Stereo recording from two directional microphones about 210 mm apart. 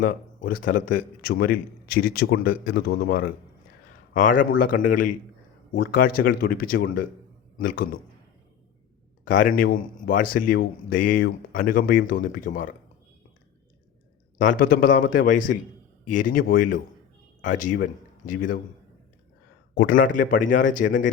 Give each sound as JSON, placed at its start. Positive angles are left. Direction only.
{"t": 0.0, "sound": "a man's voice", "side_deg": 40}
{"t": 9.2, "sound": "speech", "side_deg": 40}
{"t": 14.3, "sound": "speech", "side_deg": 40}
{"t": 19.7, "sound": "speech", "side_deg": 40}